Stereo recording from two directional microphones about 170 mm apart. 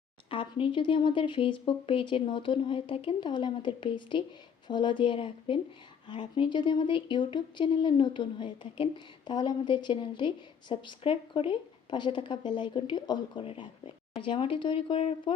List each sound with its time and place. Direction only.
0.3 s speech: 30° left (ahead or behind)